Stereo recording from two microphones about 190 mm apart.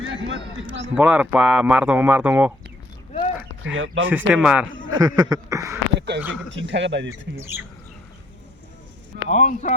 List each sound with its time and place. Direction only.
0.0 s a sound: 90° right
0.9 s speech: 5° right (ahead or behind)
3.1 s a sound: 35° left (ahead or behind)
3.7 s speech: 90° right
4.1 s speech: 5° right (ahead or behind)
4.9 s a sound: 20° right (ahead or behind)
6.1 s speech: 65° right (ahead or behind)
7.1 s speech: 15° right (ahead or behind)
9.3 s speech: 40° left (ahead or behind)